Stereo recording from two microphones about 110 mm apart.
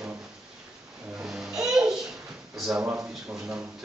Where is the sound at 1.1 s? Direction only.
5° right (ahead or behind).